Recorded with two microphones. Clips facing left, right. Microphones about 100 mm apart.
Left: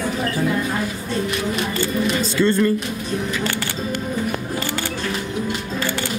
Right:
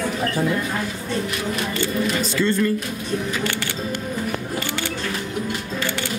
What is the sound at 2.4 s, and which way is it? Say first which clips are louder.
Speech: left 3 dB; 25° left (ahead or behind).